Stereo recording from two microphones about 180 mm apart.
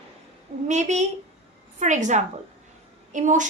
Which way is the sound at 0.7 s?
40° right (ahead or behind).